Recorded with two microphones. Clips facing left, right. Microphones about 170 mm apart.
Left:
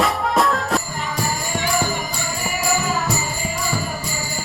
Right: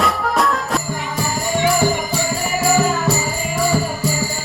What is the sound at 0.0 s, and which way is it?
Music, centre (ahead or behind).